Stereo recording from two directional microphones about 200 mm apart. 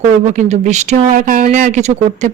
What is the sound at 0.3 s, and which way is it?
Speech, 35° right (ahead or behind).